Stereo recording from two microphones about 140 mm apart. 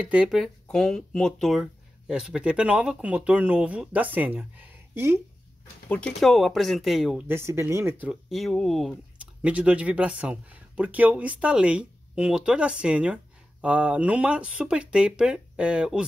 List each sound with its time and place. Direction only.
0.0 s speech: 10° right (ahead or behind)
5.9 s speech: 5° left (ahead or behind)
7.2 s speech: 20° right (ahead or behind)
8.1 s speech: centre (ahead or behind)
9.4 s speech: 10° right (ahead or behind)